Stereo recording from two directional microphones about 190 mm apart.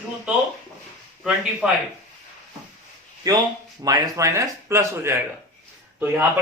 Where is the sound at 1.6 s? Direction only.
5° right (ahead or behind).